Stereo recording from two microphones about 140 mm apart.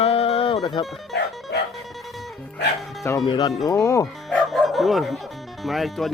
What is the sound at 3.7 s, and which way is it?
Speech, 20° left (ahead or behind).